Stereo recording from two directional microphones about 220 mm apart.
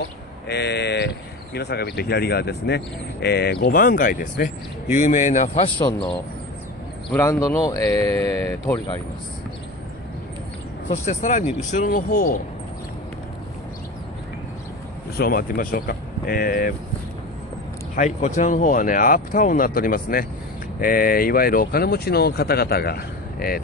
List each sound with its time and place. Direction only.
0.5 s speech: 50° left (ahead or behind); by 5.9 s 25° left (ahead or behind)
7.1 s speech: 10° left (ahead or behind)
10.9 s speech: 30° left (ahead or behind)
15.1 s speech: 40° left (ahead or behind)
17.9 s speech: 35° left (ahead or behind)